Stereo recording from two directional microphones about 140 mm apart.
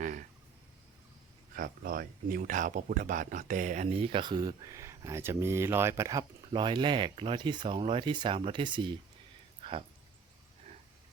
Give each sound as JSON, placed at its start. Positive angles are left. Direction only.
{"t": 1.5, "sound": "speech", "side_deg": -90}
{"t": 6.5, "sound": "speech", "side_deg": -35}